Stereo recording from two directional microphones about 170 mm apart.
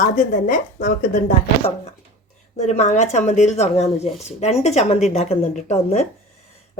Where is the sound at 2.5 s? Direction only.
40° left (ahead or behind).